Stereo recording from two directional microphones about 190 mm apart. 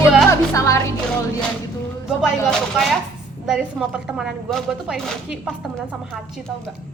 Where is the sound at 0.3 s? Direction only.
15° left (ahead or behind).